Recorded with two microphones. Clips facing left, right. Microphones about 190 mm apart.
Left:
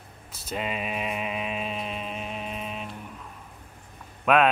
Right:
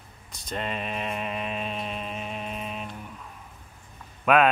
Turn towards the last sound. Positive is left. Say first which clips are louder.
# even
turn(degrees=0)  # may be behind; listen again after turning